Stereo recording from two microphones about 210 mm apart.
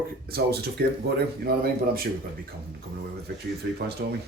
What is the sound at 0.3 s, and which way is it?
Speech, 45° right (ahead or behind).